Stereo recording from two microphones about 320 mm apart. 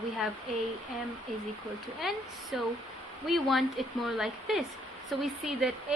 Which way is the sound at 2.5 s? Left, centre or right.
Centre.